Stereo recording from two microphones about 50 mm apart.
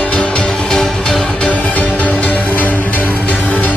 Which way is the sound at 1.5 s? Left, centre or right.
Left.